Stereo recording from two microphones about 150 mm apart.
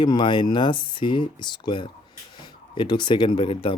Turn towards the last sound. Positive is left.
turn(degrees=35)  # may be behind; listen again after turning